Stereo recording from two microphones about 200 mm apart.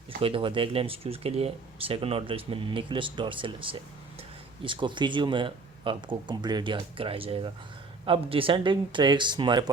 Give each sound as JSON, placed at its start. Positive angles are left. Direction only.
{"t": 0.2, "sound": "speech", "side_deg": -25}